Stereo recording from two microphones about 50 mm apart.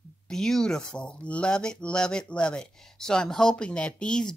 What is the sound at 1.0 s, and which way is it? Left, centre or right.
A woman's voice, left.